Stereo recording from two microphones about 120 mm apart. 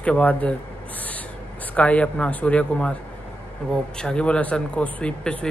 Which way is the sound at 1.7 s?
10° left (ahead or behind).